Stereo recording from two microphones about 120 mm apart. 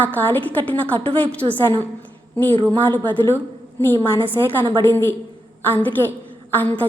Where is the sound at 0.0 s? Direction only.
15° left (ahead or behind).